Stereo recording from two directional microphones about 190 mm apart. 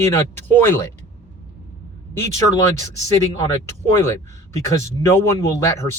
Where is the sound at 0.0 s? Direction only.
15° left (ahead or behind).